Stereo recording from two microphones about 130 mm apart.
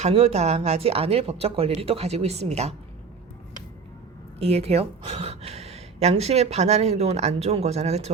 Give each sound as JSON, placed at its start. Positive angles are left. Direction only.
{"t": 0.0, "sound": "speech", "side_deg": -55}
{"t": 4.4, "sound": "a woman's voice", "side_deg": -50}